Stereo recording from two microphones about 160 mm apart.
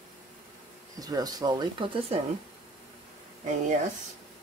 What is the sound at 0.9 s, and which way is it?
Speech, 25° right (ahead or behind).